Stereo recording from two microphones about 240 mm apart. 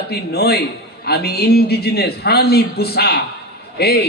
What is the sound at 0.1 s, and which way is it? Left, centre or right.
A man's voice, left.